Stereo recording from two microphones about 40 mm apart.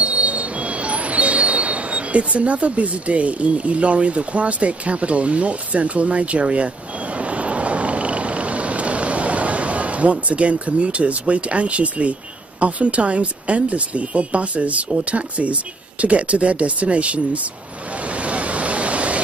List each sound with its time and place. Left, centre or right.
0.0 s speech: right
6.4 s a sound: right
10.2 s speech: right
17.9 s waves: right